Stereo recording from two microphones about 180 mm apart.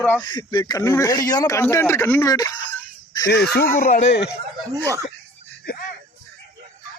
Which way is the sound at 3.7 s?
45° left (ahead or behind).